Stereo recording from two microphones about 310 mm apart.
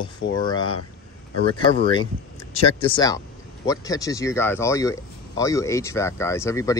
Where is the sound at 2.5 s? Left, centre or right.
Centre.